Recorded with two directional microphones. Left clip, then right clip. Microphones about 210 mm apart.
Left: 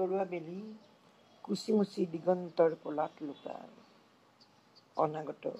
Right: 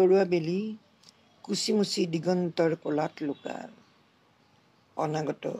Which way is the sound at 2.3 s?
30° right (ahead or behind).